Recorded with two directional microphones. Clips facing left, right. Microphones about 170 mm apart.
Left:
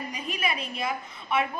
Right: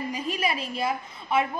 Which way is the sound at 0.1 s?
30° right (ahead or behind).